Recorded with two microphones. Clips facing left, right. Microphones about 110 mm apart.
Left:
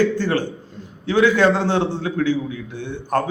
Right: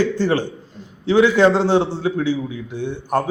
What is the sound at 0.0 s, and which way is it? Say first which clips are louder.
A man's voice: right 1 dB; 15° right (ahead or behind).